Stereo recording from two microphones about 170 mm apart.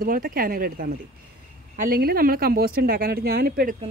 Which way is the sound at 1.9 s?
65° right (ahead or behind).